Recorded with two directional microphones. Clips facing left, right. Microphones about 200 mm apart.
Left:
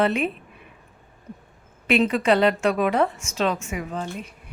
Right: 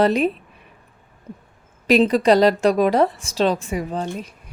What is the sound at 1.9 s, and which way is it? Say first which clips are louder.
A woman's voice: right 5 dB; 35° right (ahead or behind).